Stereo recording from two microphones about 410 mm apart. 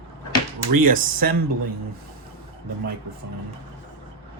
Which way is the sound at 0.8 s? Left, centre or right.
Centre.